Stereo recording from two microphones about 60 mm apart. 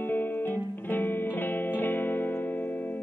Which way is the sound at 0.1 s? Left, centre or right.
Left.